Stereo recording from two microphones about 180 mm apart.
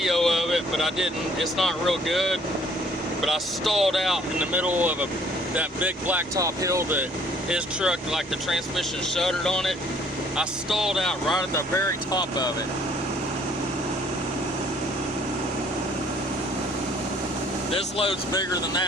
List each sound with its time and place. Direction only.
0.0 s speech: centre (ahead or behind); by 7.0 s 15° right (ahead or behind)
7.5 s speech: 5° right (ahead or behind)
11.5 s speech: 15° left (ahead or behind)
17.7 s speech: 30° left (ahead or behind)